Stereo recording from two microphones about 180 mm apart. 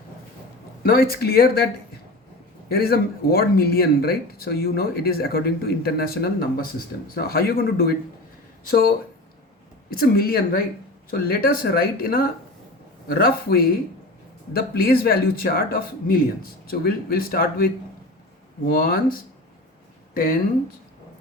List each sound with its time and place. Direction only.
0.8 s speech: 55° left (ahead or behind)
2.6 s speech: 60° left (ahead or behind)
9.9 s speech: 55° left (ahead or behind)
18.7 s speech: 55° left (ahead or behind)